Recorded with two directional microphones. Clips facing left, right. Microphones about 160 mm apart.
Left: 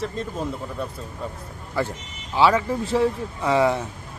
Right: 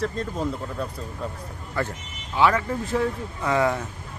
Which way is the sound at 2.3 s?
30° left (ahead or behind).